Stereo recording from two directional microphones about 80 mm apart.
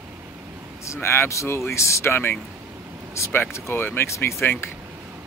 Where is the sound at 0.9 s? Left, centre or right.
Left.